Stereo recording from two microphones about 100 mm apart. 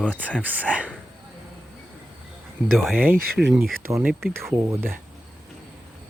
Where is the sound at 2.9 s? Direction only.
20° right (ahead or behind).